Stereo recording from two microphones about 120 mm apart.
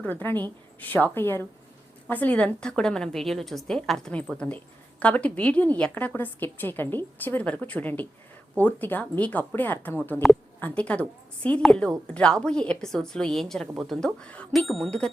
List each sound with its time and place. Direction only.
0.0 s a woman's voice: 15° left (ahead or behind)
10.2 s a woman's voice: centre (ahead or behind)
10.6 s a woman's voice: 10° left (ahead or behind)